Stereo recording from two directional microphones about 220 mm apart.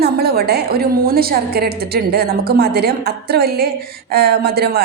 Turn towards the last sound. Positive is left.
turn(degrees=-45)  # may be behind; listen again after turning